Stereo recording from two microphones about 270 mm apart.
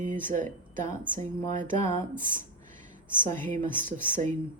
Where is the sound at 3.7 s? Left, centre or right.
Centre.